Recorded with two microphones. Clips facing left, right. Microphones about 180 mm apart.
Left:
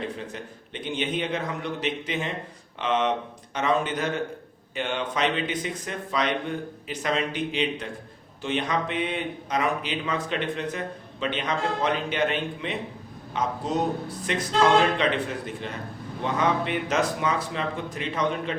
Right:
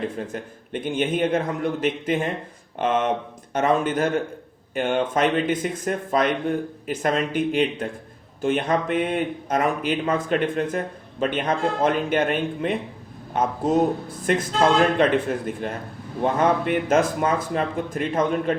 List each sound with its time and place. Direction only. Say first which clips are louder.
0.2 s speech: right 5 dB; 50° right (ahead or behind)